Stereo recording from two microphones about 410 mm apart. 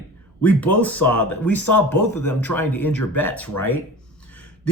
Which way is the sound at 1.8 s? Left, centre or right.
Left.